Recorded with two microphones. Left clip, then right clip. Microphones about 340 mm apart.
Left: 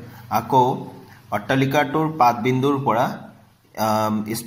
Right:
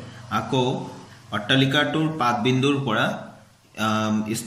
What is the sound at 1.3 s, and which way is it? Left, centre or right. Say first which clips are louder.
Speech: left 1 dB; centre.